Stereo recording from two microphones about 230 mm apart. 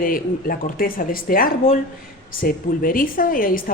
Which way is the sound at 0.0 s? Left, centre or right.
Left.